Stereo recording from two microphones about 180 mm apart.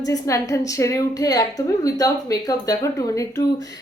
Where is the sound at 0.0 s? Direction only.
20° left (ahead or behind).